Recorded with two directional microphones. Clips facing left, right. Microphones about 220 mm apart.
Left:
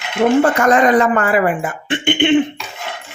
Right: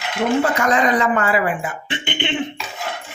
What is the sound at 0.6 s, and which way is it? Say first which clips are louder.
Speech: left 5 dB; 50° left (ahead or behind).